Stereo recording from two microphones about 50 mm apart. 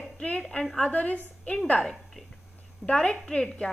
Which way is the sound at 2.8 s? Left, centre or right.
Centre.